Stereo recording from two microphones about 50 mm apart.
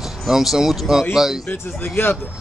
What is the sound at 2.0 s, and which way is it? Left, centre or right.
Speech, left.